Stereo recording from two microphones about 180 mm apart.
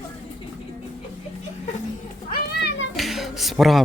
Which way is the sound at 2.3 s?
65° left (ahead or behind).